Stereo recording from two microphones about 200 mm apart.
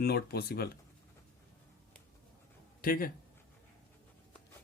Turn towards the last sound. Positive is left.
turn(degrees=45)  # may be behind; listen again after turning